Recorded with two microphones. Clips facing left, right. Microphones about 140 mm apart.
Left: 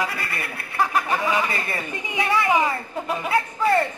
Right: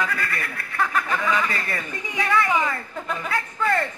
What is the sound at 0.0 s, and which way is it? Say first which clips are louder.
Snicker: right 1 dB; 15° left (ahead or behind).